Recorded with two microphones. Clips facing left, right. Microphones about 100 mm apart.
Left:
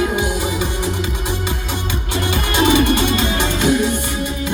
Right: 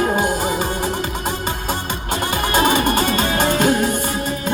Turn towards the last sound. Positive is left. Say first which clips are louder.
# even
turn(degrees=-45)  # may be behind; listen again after turning